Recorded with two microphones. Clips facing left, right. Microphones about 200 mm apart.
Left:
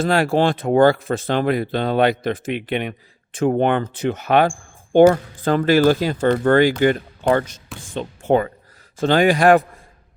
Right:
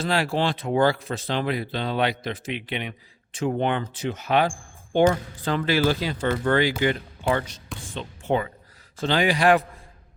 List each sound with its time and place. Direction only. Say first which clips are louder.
0.0 s speech: left 7 dB; 50° left (ahead or behind)